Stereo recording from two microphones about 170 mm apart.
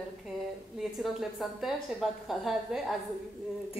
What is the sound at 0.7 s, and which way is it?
A woman's voice, centre (ahead or behind).